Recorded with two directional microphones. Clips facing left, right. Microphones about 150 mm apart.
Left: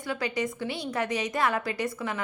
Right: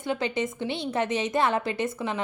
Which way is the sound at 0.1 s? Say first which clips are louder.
Right 2 dB; 25° right (ahead or behind).